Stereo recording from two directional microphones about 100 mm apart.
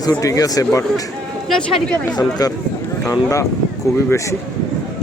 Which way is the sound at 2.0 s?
40° left (ahead or behind).